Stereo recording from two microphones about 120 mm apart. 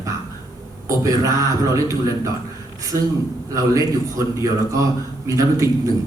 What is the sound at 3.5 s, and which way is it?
Speech, 30° right (ahead or behind).